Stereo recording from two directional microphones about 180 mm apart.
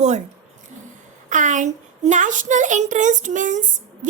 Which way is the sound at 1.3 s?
45° right (ahead or behind).